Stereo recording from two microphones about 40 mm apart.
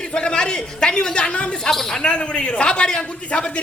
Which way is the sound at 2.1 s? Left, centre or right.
Left.